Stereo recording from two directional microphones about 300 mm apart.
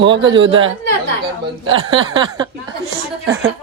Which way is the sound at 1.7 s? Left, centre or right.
Centre.